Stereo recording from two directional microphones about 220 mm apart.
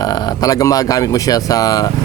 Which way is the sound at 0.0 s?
15° left (ahead or behind).